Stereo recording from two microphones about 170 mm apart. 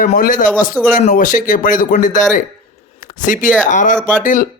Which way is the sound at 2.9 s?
50° left (ahead or behind).